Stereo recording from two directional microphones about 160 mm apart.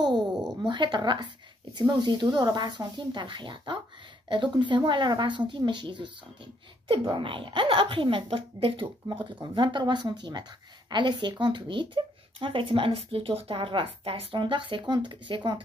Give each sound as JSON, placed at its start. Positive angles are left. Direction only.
{"t": 0.6, "sound": "speech", "side_deg": -30}